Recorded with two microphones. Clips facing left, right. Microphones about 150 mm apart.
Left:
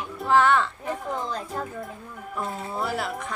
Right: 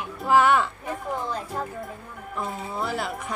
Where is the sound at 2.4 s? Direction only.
5° left (ahead or behind).